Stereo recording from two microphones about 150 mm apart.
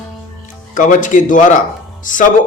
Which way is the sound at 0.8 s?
60° left (ahead or behind).